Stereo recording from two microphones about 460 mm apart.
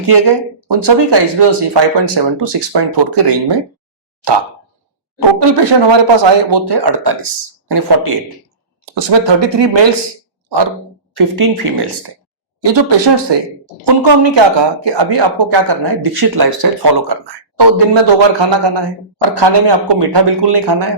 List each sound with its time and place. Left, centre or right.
0.1 s speech: right
5.4 s speech: right
9.0 s speech: right
11.1 s speech: right